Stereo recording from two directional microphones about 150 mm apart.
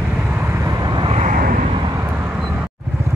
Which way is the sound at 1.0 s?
45° right (ahead or behind).